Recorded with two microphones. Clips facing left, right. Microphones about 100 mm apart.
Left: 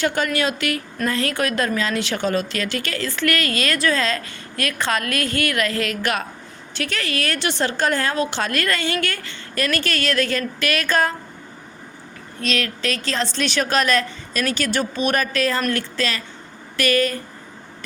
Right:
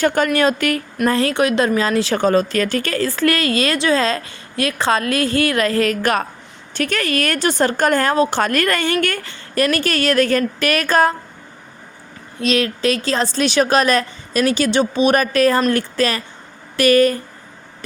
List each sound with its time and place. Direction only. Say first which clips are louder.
0.0 s a woman's voice: right 5 dB; 50° right (ahead or behind)
1.0 s a woman's voice: right 6 dB; 35° right (ahead or behind); by 8.1 s 50° right (ahead or behind)
8.1 s a woman's voice: right 6 dB; 40° right (ahead or behind)
13.1 s a woman's voice: right 5 dB; 40° right (ahead or behind)